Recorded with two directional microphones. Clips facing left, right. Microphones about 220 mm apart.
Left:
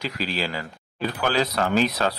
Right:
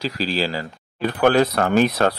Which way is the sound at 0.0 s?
35° right (ahead or behind).